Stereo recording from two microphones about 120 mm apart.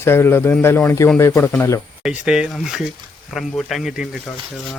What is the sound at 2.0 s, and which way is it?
Speech, 5° right (ahead or behind).